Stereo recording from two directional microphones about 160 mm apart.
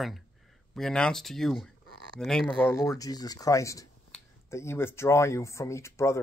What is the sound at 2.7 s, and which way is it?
Speech, 20° left (ahead or behind).